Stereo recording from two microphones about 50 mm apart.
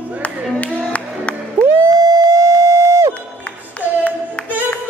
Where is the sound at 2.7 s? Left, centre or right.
Right.